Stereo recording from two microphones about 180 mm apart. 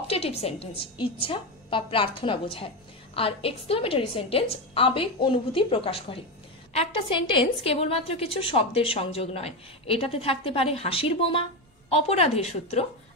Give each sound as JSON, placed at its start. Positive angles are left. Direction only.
{"t": 0.1, "sound": "a woman's voice", "side_deg": 35}